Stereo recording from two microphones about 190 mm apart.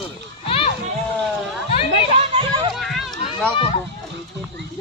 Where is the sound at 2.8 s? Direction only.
Centre (ahead or behind).